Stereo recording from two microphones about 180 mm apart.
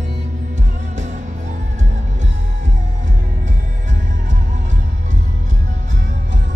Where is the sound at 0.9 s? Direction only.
40° right (ahead or behind).